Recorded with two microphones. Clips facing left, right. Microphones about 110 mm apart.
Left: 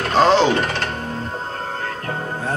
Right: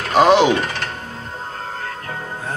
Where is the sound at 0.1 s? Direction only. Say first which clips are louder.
Right 2 dB; 15° right (ahead or behind).